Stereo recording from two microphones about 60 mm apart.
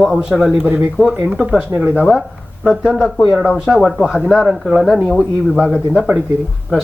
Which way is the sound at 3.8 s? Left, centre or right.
Centre.